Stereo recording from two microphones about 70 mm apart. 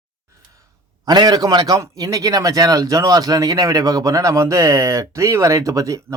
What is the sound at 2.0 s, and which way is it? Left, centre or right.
Speech, right.